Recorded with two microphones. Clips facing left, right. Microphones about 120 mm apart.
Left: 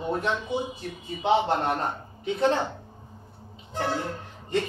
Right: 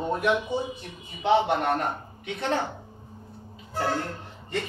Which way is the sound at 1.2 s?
25° left (ahead or behind).